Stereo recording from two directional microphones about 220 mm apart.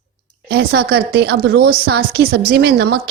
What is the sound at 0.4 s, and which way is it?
A woman's voice, 45° right (ahead or behind).